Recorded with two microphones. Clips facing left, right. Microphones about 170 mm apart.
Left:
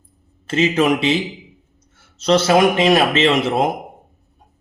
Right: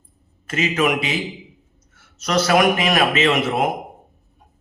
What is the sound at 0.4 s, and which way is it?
A man's voice, 30° left (ahead or behind).